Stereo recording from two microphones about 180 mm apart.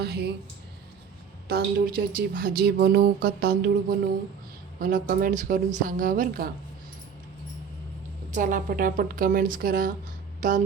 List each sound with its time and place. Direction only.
0.0 s speech: 60° right (ahead or behind)
1.5 s speech: 60° right (ahead or behind)
8.3 s speech: 50° right (ahead or behind)